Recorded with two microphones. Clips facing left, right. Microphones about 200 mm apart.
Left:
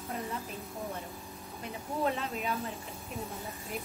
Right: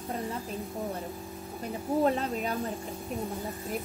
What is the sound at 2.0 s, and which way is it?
Speech, 40° right (ahead or behind).